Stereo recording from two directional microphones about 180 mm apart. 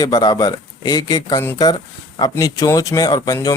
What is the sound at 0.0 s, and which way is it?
Speech, 20° left (ahead or behind).